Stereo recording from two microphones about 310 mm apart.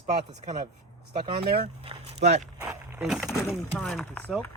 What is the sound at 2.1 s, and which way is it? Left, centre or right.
Speech, right.